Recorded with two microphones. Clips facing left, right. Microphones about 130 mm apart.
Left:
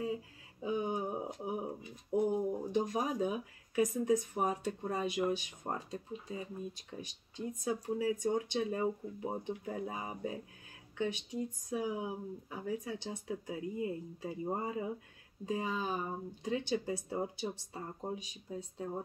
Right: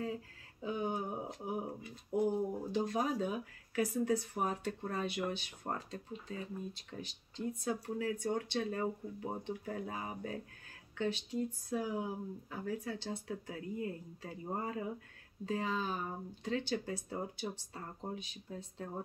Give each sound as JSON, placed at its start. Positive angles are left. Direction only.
{"t": 0.0, "sound": "speech", "side_deg": 15}